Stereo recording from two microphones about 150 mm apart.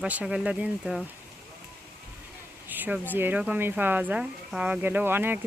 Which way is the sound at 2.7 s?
10° right (ahead or behind).